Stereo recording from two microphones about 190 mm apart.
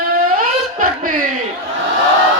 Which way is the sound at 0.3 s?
45° right (ahead or behind).